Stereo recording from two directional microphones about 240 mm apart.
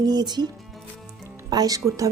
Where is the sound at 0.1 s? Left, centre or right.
Centre.